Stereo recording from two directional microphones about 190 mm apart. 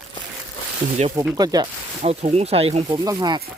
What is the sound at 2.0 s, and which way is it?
Speech, 35° right (ahead or behind).